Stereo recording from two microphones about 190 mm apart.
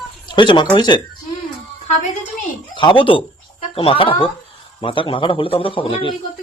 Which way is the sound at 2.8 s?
25° left (ahead or behind).